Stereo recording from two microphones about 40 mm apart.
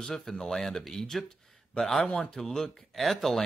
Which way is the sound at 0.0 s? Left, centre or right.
Centre.